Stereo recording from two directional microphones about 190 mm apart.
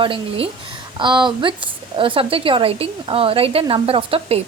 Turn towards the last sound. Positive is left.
turn(degrees=-30)  # may be behind; listen again after turning